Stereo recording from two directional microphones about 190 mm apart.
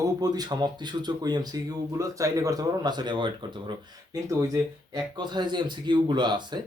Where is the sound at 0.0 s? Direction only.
20° right (ahead or behind).